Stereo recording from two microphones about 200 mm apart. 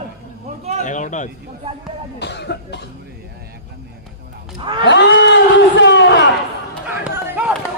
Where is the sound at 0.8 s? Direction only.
40° left (ahead or behind).